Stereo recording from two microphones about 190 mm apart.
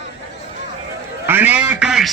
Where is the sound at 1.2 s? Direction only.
10° right (ahead or behind).